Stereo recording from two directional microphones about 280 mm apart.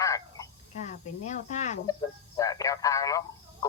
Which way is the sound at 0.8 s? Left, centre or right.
Left.